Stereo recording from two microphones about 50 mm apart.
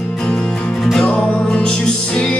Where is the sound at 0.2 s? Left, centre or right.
Centre.